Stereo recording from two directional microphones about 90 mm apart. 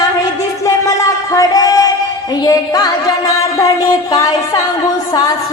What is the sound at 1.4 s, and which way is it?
Music, 45° left (ahead or behind).